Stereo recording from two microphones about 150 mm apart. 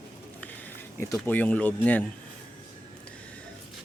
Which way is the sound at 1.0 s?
15° left (ahead or behind).